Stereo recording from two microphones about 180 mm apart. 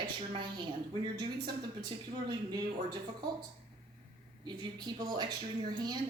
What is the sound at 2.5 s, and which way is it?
Speech, 25° right (ahead or behind).